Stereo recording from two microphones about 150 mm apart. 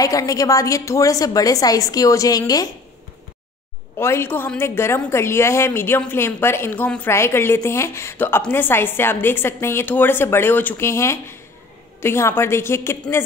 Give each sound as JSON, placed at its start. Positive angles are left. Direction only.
{"t": 0.0, "sound": "a woman's voice", "side_deg": 25}
{"t": 4.0, "sound": "a woman's voice", "side_deg": 15}